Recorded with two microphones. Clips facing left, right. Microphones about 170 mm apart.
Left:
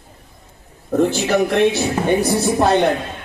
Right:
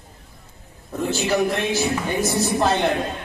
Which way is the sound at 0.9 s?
65° left (ahead or behind).